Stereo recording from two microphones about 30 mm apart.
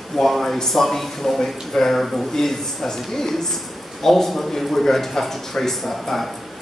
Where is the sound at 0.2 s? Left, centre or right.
Centre.